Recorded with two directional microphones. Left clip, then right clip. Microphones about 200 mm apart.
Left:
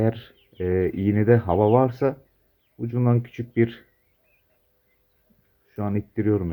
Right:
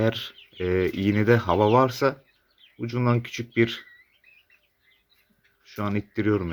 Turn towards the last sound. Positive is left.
turn(degrees=-10)  # may be behind; listen again after turning